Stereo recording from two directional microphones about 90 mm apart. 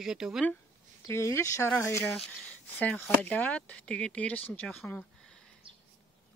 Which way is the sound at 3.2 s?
15° left (ahead or behind).